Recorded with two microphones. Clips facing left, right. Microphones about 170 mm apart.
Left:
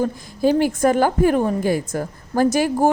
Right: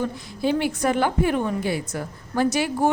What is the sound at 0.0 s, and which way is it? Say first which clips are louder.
A woman's voice: left 5 dB; 40° left (ahead or behind).